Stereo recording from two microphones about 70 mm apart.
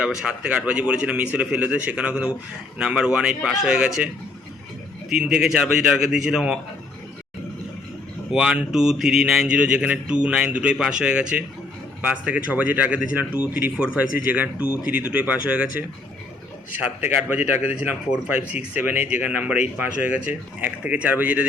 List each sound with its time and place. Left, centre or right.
0.0 s a man's voice: centre
8.3 s a man's voice: centre
17.0 s speech: right